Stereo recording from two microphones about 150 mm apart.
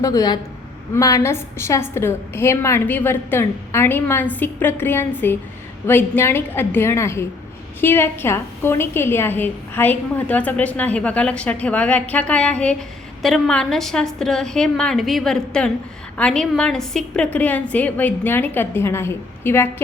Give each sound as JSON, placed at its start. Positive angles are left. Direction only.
{"t": 0.0, "sound": "a woman's voice", "side_deg": 25}